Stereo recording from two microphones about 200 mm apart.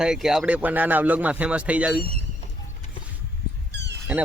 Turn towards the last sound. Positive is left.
turn(degrees=-60)  # may be behind; listen again after turning